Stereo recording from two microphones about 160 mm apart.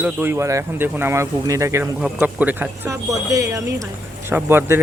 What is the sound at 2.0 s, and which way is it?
Speech, 10° right (ahead or behind).